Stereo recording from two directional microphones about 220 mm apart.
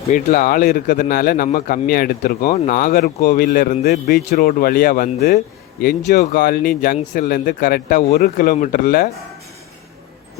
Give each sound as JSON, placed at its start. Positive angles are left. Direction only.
{"t": 0.1, "sound": "speech", "side_deg": 40}